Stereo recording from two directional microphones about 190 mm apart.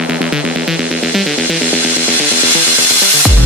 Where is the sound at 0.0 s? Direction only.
5° right (ahead or behind).